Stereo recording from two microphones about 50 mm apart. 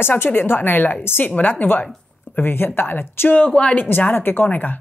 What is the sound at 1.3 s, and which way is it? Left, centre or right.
Speech, left.